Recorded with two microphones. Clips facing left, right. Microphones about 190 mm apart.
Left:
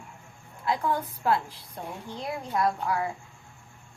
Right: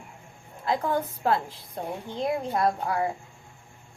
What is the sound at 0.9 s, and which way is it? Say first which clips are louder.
A woman's voice: right 1 dB; 25° right (ahead or behind).